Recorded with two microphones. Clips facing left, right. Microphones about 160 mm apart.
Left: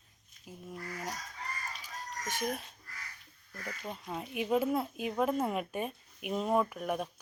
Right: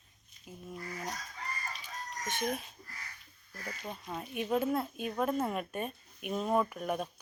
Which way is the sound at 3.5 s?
30° right (ahead or behind).